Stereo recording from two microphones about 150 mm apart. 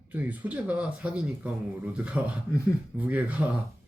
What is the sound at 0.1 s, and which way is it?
Speech, 10° right (ahead or behind).